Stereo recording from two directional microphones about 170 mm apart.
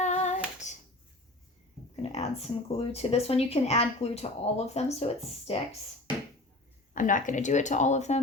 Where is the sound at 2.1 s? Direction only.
40° left (ahead or behind).